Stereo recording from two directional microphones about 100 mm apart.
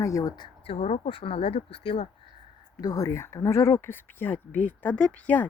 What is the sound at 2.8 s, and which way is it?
A woman's voice, 40° left (ahead or behind).